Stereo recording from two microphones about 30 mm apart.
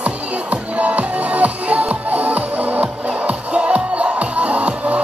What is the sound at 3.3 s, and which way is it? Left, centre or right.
Music, right.